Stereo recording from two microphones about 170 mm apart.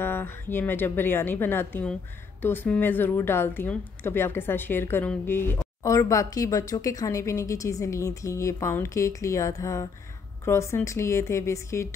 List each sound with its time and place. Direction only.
0.0 s a woman's voice: 15° left (ahead or behind)